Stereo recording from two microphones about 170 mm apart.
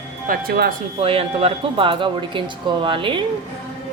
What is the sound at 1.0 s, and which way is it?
Speech, 35° right (ahead or behind).